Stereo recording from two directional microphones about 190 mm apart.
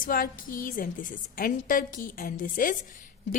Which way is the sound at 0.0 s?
45° left (ahead or behind).